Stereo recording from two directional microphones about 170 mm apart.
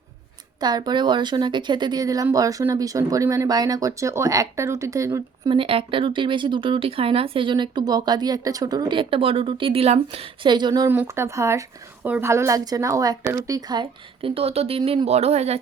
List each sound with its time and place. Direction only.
0.6 s speech: 25° right (ahead or behind)
5.5 s speech: 30° right (ahead or behind)
10.8 s speech: 15° right (ahead or behind); by 15.6 s 40° right (ahead or behind)